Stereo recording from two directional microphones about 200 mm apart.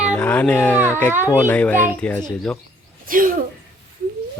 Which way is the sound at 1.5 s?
5° left (ahead or behind).